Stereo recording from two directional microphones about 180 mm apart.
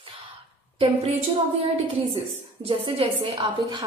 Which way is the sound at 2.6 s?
30° right (ahead or behind).